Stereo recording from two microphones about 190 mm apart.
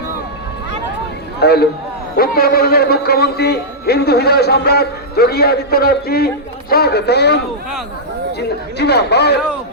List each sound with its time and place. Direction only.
1.4 s a man's voice: 60° left (ahead or behind)